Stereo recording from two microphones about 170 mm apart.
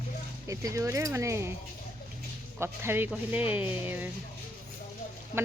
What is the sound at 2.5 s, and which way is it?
Speech, 15° right (ahead or behind).